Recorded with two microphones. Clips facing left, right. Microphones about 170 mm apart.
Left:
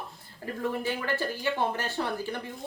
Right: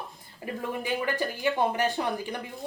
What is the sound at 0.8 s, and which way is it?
Speech, 15° right (ahead or behind).